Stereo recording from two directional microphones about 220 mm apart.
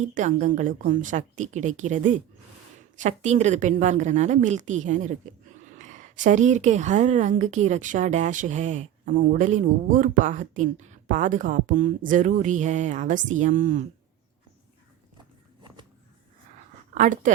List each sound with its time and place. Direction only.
0.0 s a woman's voice: 35° right (ahead or behind)
15.6 s a sound: 20° right (ahead or behind)
16.9 s speech: 35° right (ahead or behind)